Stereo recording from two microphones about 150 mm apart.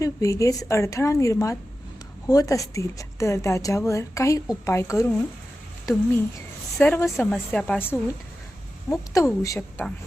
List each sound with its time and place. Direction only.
0.0 s a woman's voice: 20° left (ahead or behind)